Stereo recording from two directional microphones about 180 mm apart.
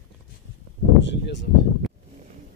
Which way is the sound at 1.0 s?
80° left.